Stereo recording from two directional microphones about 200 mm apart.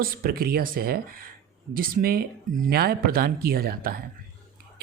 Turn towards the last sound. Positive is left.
turn(degrees=-50)  # may be behind; listen again after turning